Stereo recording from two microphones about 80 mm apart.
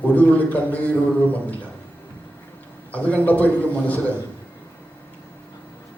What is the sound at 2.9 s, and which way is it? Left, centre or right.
A man's voice, centre.